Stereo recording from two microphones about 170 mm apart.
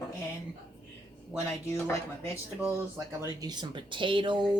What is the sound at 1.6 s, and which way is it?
Speech, 15° left (ahead or behind).